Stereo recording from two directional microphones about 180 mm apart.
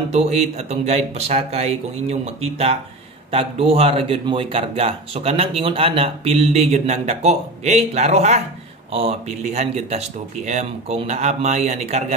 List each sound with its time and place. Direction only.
0.1 s speech: 35° right (ahead or behind)